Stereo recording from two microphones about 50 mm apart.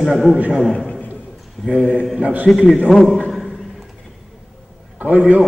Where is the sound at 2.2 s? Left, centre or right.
Right.